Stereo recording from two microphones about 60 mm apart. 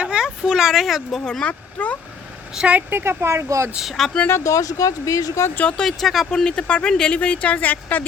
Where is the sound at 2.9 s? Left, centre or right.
Right.